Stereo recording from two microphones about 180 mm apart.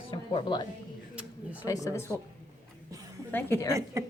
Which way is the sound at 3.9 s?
15° right (ahead or behind).